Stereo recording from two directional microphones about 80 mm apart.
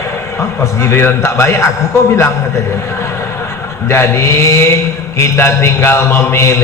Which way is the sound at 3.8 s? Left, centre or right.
Left.